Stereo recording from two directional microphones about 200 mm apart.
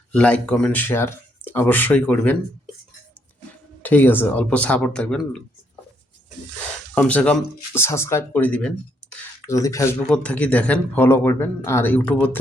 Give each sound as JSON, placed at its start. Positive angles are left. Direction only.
{"t": 0.1, "sound": "speech", "side_deg": 5}
{"t": 3.8, "sound": "speech", "side_deg": 10}
{"t": 6.9, "sound": "speech", "side_deg": 5}